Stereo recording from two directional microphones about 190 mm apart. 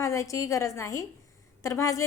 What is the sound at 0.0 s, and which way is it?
A woman's voice, 15° left (ahead or behind).